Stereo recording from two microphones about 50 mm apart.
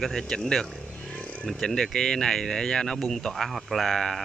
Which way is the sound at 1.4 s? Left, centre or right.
Centre.